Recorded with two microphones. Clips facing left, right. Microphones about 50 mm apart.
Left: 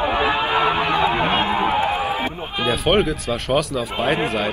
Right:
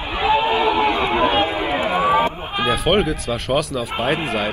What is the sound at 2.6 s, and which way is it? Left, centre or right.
Speech, centre.